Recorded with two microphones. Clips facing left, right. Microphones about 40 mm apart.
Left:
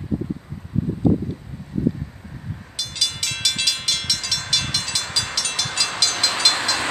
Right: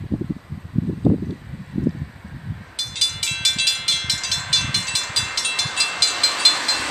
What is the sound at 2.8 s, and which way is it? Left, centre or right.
Train, centre.